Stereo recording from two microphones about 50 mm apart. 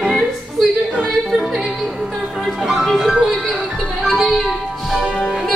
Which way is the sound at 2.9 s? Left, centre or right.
Centre.